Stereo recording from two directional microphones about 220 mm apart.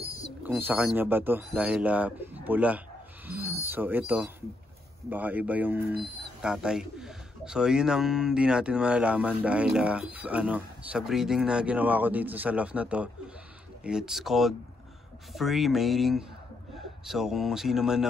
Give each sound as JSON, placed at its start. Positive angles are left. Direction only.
{"t": 0.4, "sound": "speech", "side_deg": -10}
{"t": 3.3, "sound": "wild animals", "side_deg": -10}
{"t": 3.6, "sound": "speech", "side_deg": -10}
{"t": 5.1, "sound": "a man's voice", "side_deg": -5}